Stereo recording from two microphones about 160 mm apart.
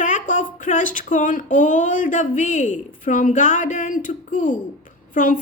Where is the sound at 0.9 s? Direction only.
55° left (ahead or behind).